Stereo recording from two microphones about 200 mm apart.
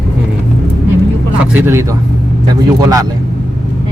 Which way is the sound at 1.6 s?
15° right (ahead or behind).